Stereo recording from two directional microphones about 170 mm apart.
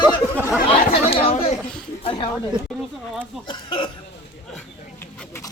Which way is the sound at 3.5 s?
30° left (ahead or behind).